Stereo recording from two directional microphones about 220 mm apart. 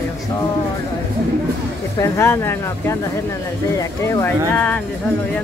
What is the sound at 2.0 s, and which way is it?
Speech, 10° left (ahead or behind).